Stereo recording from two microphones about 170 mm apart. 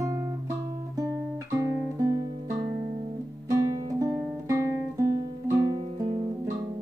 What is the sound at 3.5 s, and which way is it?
Guitar, 20° right (ahead or behind).